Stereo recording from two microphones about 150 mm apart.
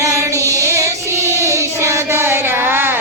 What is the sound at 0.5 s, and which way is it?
Child singing, 20° right (ahead or behind).